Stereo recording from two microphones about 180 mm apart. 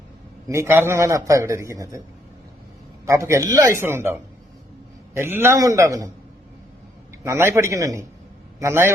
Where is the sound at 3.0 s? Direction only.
15° right (ahead or behind).